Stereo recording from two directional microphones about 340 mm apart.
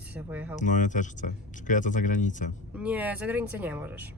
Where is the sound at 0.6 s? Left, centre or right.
Left.